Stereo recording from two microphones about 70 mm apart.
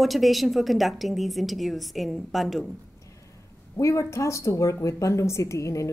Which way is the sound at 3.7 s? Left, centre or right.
Left.